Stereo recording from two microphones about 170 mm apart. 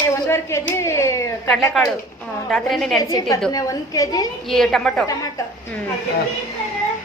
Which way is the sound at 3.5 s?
20° left (ahead or behind).